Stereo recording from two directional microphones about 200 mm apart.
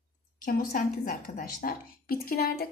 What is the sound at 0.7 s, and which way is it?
A woman's voice, 45° left (ahead or behind).